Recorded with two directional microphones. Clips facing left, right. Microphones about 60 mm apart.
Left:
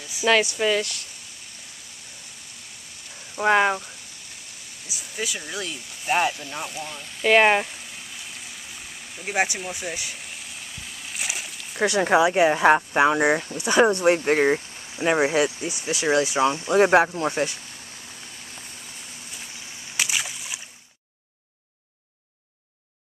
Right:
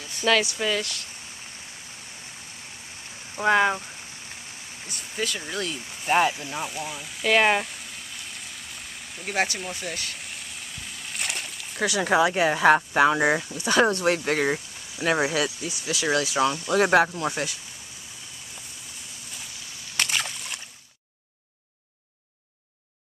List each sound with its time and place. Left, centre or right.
0.3 s speech: left
3.4 s speech: centre
4.8 s speech: centre
7.2 s a sound: centre
12.0 s speech: centre; by 17.6 s left
20.0 s slosh: centre